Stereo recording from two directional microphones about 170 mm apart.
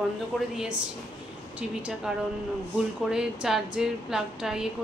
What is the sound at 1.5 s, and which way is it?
Speech, 5° right (ahead or behind).